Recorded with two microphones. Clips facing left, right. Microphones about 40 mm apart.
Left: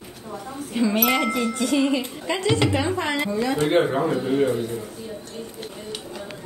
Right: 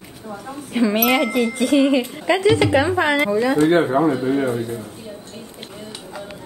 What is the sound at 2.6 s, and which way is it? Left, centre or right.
Speech, centre.